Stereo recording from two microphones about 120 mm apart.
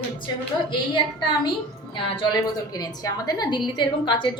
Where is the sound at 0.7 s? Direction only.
40° left (ahead or behind).